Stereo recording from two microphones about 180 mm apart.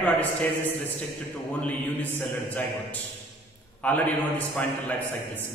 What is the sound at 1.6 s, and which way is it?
A man's voice, 10° left (ahead or behind).